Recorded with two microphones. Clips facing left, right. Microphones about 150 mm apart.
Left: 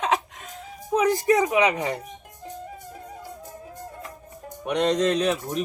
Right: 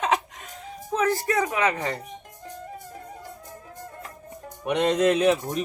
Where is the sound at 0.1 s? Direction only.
Centre (ahead or behind).